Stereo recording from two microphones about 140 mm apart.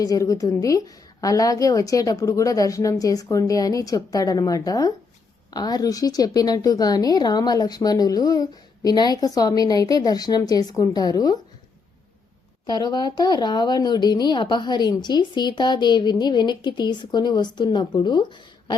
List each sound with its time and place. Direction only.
0.0 s a woman's voice: 25° left (ahead or behind)
12.6 s speech: 30° left (ahead or behind)